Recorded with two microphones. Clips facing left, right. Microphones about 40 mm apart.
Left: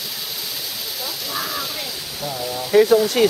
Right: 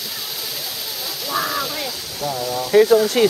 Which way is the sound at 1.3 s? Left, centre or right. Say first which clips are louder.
Right 6 dB; centre.